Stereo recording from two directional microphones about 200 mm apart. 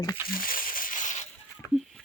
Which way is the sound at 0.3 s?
45° left (ahead or behind).